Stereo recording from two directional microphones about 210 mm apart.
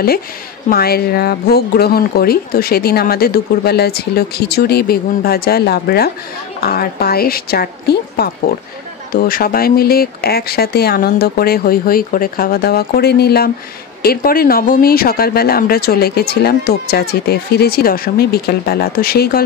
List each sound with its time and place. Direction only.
0.7 s speech: 45° left (ahead or behind)